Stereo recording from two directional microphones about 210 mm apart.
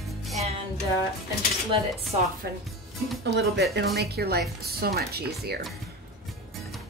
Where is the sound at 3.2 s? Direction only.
55° right (ahead or behind).